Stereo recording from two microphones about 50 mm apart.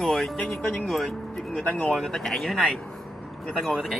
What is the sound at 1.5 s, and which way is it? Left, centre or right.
Speech, centre.